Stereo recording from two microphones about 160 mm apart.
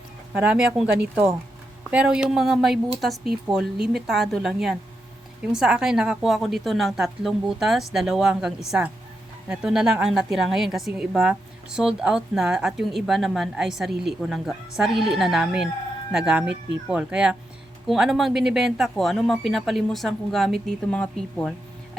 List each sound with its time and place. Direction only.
0.3 s a woman's voice: 5° right (ahead or behind)